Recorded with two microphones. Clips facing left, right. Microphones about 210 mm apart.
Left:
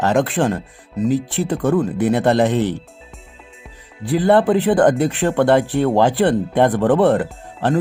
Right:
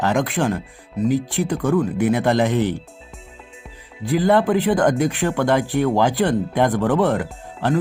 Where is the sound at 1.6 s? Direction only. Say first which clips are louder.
Left 2 dB; 25° left (ahead or behind).